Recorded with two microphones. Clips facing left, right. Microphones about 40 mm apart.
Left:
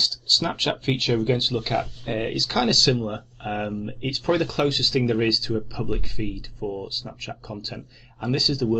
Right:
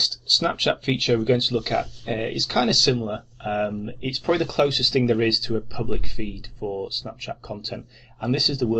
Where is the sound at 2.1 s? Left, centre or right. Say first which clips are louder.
Even; centre.